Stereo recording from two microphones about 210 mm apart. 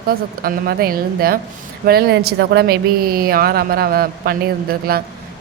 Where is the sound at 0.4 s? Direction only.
45° right (ahead or behind).